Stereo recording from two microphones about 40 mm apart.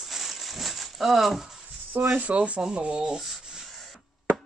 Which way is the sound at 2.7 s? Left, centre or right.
Right.